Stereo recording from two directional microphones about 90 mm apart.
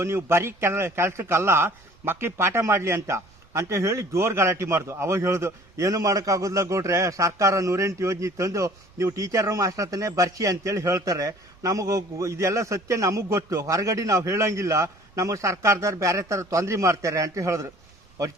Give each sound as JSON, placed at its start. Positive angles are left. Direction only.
{"t": 0.0, "sound": "a man's voice", "side_deg": -30}